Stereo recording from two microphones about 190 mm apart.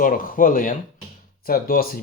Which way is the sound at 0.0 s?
45° left (ahead or behind).